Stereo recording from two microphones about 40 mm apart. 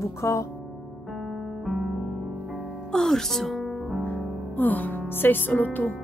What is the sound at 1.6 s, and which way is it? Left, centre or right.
Music, centre.